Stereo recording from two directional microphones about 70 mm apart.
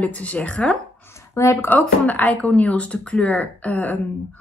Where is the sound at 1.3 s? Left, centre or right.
Left.